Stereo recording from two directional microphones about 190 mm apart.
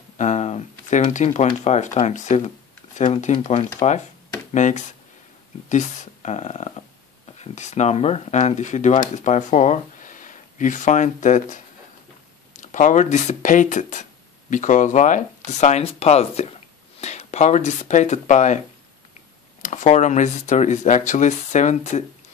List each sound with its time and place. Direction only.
0.2 s speech: 35° left (ahead or behind)
19.6 s speech: 40° left (ahead or behind)